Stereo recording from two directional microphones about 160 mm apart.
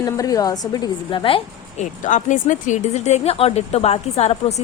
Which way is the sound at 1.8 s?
50° left (ahead or behind).